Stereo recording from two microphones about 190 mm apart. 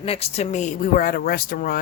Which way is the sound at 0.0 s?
30° left (ahead or behind).